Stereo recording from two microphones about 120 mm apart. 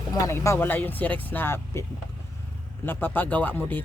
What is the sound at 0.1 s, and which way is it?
Speech, 25° left (ahead or behind).